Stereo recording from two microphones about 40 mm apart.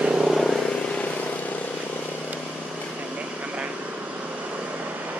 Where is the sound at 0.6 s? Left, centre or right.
Left.